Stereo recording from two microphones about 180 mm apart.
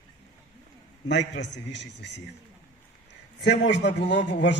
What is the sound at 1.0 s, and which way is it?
A man's voice, 80° left.